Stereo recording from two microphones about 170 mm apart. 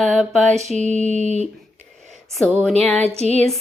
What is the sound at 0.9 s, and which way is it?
Music, 40° left (ahead or behind).